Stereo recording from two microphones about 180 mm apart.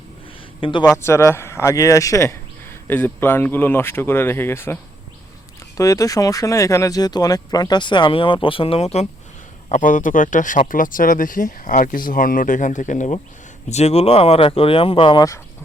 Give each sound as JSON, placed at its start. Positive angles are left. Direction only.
{"t": 0.6, "sound": "speech", "side_deg": 25}
{"t": 1.0, "sound": "speech", "side_deg": 15}